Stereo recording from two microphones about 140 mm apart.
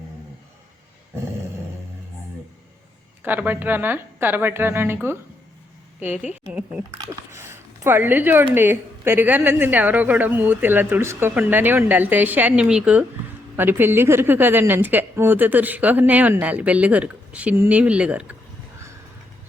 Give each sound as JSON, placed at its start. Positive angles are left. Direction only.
{"t": 3.2, "sound": "a woman's voice", "side_deg": -10}
{"t": 6.5, "sound": "a woman's voice", "side_deg": -10}